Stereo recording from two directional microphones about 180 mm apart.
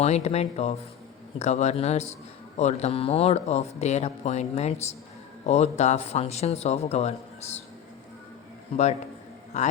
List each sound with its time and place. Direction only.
0.0 s speech: 35° left (ahead or behind)
8.7 s speech: 40° left (ahead or behind)